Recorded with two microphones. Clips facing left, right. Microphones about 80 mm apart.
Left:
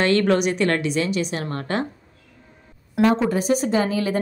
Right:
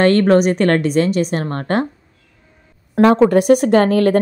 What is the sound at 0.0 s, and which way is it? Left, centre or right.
A woman's voice, right.